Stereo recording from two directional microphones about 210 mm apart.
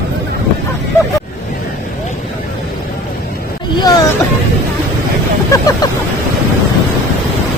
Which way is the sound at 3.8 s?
20° left (ahead or behind).